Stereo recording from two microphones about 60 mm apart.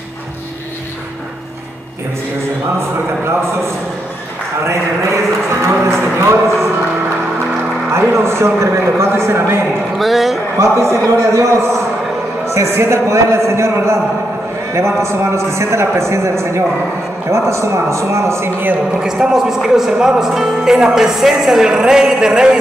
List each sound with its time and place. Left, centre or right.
4.6 s a man's voice: right
7.9 s a man's voice: right
9.9 s a man's voice: centre
10.6 s a man's voice: right
18.9 s speech: centre